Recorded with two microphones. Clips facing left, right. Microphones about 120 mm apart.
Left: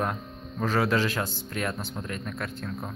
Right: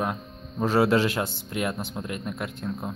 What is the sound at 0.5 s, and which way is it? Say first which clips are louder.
Speech: right 4 dB; 25° right (ahead or behind).